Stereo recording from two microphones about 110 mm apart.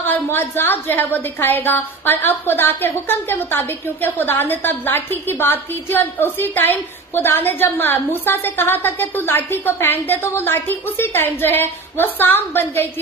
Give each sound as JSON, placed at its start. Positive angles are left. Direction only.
{"t": 0.0, "sound": "a woman's voice", "side_deg": 20}